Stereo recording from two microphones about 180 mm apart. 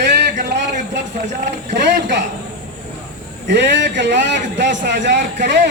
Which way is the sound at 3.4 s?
75° right (ahead or behind).